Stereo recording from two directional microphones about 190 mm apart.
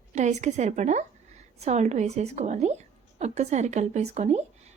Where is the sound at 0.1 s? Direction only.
40° right (ahead or behind).